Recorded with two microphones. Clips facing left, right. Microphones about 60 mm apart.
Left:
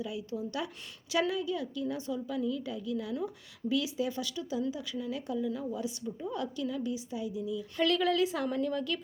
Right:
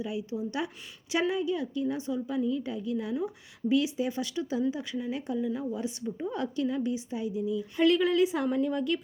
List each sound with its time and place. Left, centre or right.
0.0 s a woman's voice: right
7.8 s a woman's voice: centre